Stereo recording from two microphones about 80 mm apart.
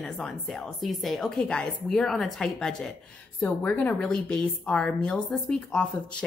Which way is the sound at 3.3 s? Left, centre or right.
Left.